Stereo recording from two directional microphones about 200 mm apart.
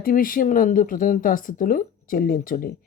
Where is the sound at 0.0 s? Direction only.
45° left (ahead or behind).